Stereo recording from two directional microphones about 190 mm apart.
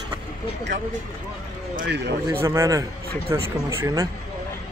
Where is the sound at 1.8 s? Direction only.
60° right (ahead or behind).